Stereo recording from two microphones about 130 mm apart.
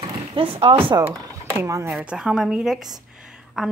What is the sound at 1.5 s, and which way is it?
Speech, 20° right (ahead or behind).